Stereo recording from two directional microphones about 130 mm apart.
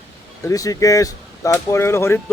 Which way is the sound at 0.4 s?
25° left (ahead or behind).